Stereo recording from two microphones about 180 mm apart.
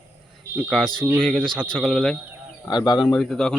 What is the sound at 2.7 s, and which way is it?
Speech, 25° left (ahead or behind).